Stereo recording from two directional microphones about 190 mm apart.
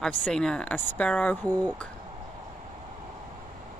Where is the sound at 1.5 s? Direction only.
20° right (ahead or behind).